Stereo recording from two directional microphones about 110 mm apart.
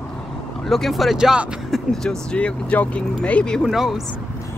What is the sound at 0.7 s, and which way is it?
Speech, centre (ahead or behind).